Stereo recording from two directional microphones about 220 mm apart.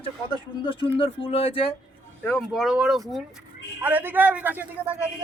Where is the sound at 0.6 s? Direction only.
20° left (ahead or behind).